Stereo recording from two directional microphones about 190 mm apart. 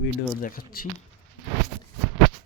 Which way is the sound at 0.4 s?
50° left (ahead or behind).